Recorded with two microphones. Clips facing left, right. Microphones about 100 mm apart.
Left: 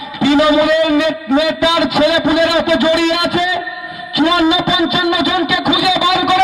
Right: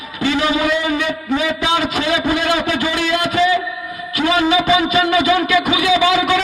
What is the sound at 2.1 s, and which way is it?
Speech, 20° left (ahead or behind).